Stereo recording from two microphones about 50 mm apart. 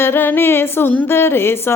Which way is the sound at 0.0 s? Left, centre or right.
Left.